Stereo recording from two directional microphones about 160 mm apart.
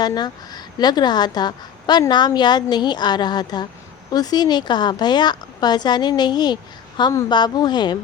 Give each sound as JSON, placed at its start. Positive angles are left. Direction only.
{"t": 0.0, "sound": "a woman's voice", "side_deg": 25}